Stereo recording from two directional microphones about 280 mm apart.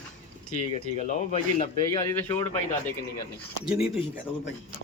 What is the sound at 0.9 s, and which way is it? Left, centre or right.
A man's voice, left.